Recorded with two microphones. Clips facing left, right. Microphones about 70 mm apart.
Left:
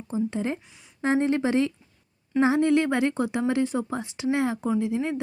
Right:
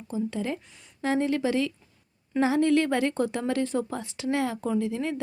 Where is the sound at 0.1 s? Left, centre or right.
Left.